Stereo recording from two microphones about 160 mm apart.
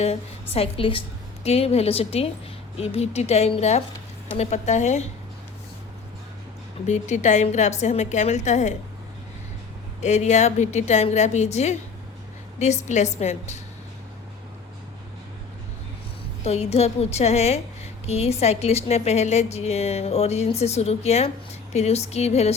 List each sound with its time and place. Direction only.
0.0 s a woman's voice: 40° left (ahead or behind)
6.8 s a woman's voice: 45° left (ahead or behind)
10.0 s a woman's voice: 45° left (ahead or behind)
16.4 s a woman's voice: 40° left (ahead or behind)